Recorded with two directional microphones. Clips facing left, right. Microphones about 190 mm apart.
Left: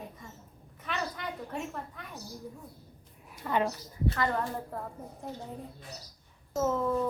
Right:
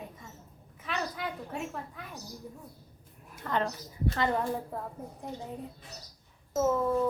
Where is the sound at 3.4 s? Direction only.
10° left (ahead or behind).